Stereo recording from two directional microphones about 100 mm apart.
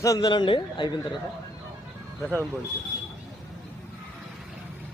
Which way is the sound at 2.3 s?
25° right (ahead or behind).